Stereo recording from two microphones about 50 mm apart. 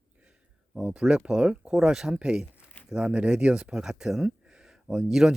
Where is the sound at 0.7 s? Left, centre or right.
Right.